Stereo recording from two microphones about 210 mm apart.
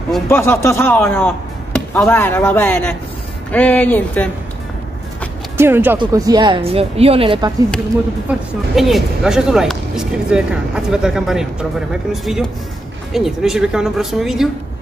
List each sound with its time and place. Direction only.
0.3 s speech: 10° left (ahead or behind)
5.6 s speech: 10° right (ahead or behind)
8.7 s speech: centre (ahead or behind)